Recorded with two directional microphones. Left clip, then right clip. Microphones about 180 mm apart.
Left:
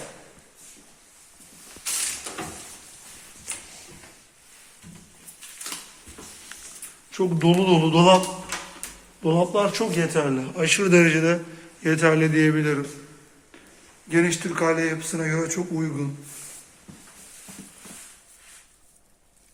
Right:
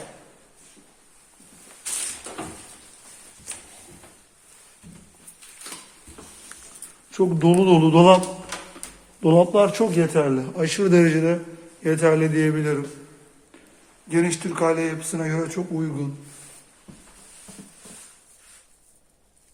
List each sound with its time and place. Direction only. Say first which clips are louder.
7.1 s speech: right 3 dB; 45° right (ahead or behind)
10.5 s a man's voice: left 3 dB; 25° right (ahead or behind)
11.8 s a man's voice: right 1 dB; 10° right (ahead or behind)
14.1 s a man's voice: left 1 dB; 10° right (ahead or behind)